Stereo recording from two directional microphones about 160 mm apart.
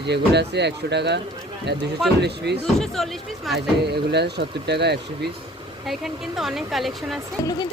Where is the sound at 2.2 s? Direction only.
90° right.